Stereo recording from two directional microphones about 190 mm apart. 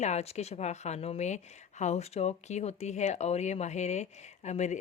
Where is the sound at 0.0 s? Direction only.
35° left (ahead or behind).